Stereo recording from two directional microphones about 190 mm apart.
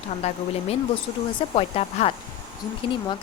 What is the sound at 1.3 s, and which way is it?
Speech, 30° left (ahead or behind).